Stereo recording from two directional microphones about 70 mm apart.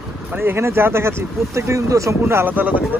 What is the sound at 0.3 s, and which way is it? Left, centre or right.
Speech, right.